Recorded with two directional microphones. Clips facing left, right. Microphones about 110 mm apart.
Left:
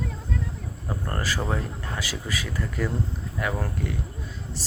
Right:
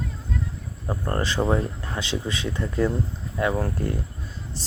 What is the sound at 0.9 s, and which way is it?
Speech, 25° right (ahead or behind).